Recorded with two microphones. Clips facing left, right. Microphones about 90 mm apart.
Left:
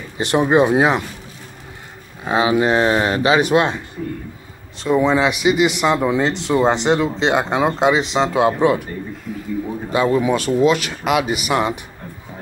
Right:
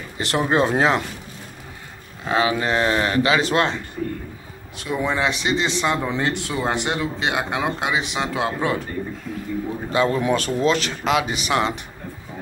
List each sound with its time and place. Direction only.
0.2 s speech: 20° left (ahead or behind)
2.2 s speech: 20° left (ahead or behind)
4.8 s speech: 20° left (ahead or behind)
9.3 s speech: 5° left (ahead or behind)